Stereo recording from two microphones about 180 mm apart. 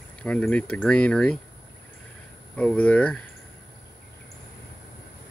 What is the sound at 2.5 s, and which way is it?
Speech, 5° left (ahead or behind).